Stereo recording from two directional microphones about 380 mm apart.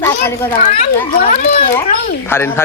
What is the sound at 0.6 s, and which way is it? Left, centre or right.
A child's voice, centre.